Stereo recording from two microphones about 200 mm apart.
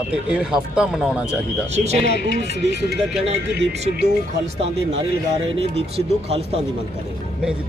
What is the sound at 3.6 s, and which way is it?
Speech, 55° right (ahead or behind).